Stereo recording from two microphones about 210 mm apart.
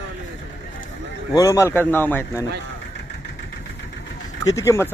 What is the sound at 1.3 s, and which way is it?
Speech, 15° left (ahead or behind).